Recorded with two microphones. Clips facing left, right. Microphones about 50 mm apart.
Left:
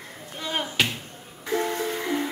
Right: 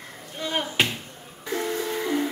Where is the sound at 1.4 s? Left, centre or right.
Left.